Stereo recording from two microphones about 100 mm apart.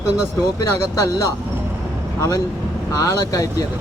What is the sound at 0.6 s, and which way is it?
Speech, 35° left (ahead or behind).